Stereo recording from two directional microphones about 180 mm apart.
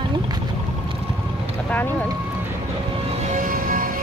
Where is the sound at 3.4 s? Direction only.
50° right (ahead or behind).